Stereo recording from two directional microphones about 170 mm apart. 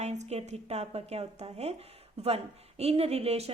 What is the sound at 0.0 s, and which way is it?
A woman's voice, 40° right (ahead or behind).